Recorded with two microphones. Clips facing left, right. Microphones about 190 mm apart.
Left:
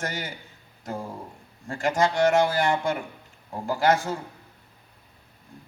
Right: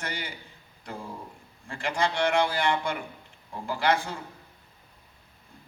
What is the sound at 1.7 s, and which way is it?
A man's voice, 45° left (ahead or behind).